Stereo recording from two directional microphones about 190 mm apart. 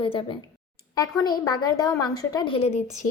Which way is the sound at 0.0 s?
25° left (ahead or behind).